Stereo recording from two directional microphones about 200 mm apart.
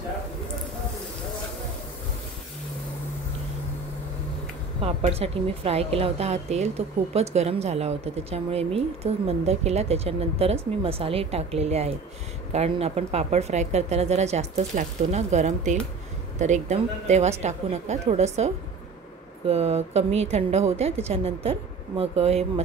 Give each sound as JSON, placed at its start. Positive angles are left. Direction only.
{"t": 4.8, "sound": "speech", "side_deg": -30}